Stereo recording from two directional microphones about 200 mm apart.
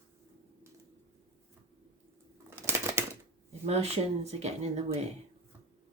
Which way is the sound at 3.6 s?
30° right (ahead or behind).